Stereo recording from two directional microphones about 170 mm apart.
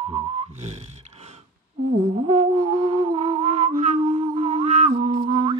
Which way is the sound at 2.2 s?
40° right (ahead or behind).